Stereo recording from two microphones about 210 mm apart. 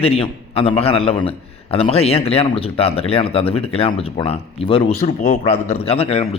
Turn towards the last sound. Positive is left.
turn(degrees=30)  # may be behind; listen again after turning